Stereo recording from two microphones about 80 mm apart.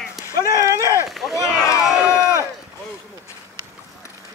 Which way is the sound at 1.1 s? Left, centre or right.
Centre.